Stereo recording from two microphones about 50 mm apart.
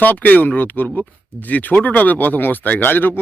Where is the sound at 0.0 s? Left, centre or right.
Left.